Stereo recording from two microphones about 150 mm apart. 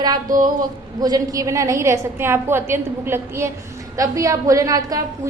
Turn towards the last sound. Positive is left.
turn(degrees=-25)  # may be behind; listen again after turning